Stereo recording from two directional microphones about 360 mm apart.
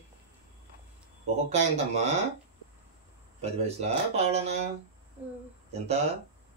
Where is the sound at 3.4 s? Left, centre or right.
Centre.